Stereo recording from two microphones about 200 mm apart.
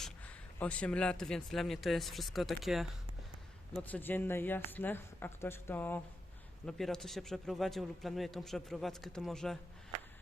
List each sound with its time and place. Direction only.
0.6 s a man's voice: 5° left (ahead or behind)